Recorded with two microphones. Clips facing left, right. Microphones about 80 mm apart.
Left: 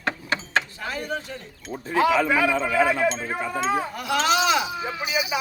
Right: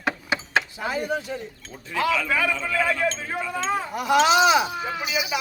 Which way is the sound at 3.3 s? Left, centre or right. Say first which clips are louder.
Left 1 dB; left.